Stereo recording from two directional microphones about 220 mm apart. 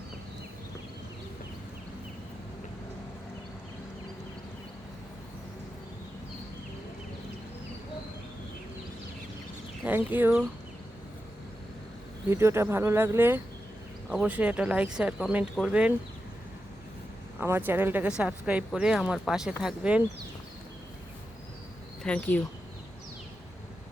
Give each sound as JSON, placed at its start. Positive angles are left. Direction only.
{"t": 9.8, "sound": "speech", "side_deg": -10}
{"t": 12.3, "sound": "speech", "side_deg": -10}
{"t": 17.4, "sound": "speech", "side_deg": -10}
{"t": 22.0, "sound": "speech", "side_deg": 5}